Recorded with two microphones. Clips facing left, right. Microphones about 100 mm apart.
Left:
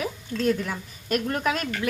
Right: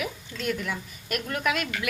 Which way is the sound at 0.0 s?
35° left (ahead or behind).